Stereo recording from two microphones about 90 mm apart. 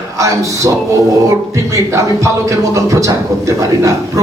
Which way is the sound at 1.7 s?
35° right (ahead or behind).